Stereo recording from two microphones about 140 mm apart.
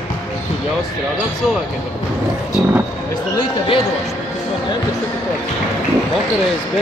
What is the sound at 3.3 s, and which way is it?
Speech, 40° left (ahead or behind).